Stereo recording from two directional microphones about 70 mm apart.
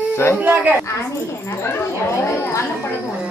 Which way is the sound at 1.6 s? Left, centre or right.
Left.